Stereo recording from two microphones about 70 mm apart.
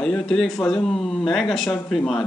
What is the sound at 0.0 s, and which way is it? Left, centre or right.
Speech, centre.